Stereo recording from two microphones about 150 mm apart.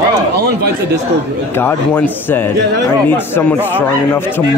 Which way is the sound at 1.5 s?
15° left (ahead or behind).